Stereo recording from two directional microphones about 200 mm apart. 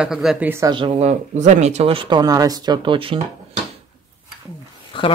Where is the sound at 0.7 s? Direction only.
30° right (ahead or behind).